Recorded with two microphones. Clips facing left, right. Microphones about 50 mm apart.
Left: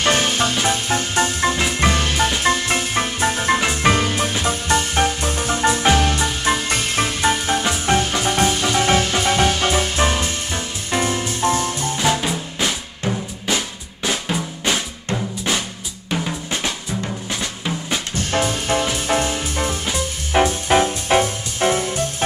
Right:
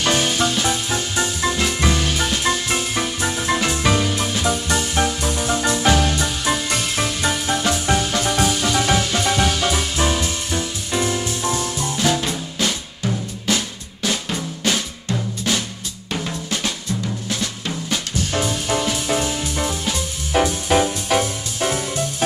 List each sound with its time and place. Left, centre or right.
0.0 s music: left
3.5 s music: left
3.9 s music: left
12.0 s music: centre
16.1 s drum: centre
18.3 s music: left